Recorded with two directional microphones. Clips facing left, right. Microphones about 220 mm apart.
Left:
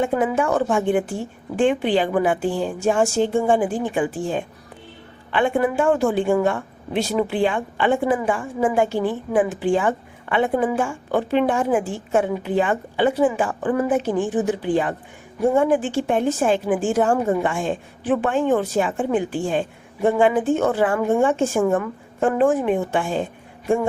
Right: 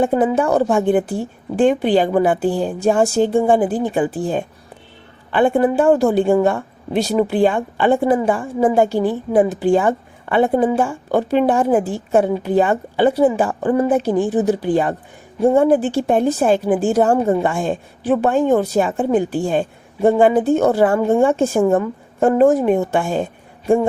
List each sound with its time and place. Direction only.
0.0 s a woman's voice: 35° right (ahead or behind)